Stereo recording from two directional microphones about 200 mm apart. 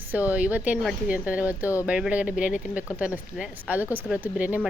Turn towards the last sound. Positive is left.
turn(degrees=-5)  # may be behind; listen again after turning